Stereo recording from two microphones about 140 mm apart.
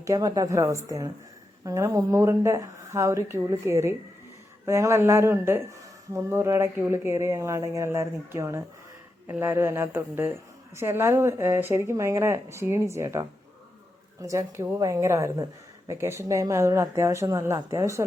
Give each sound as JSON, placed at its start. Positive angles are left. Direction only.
{"t": 0.0, "sound": "speech", "side_deg": -25}